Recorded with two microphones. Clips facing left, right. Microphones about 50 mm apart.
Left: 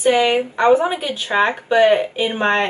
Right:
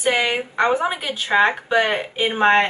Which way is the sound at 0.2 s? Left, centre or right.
Centre.